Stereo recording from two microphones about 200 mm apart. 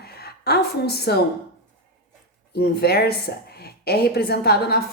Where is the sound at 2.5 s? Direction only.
50° left (ahead or behind).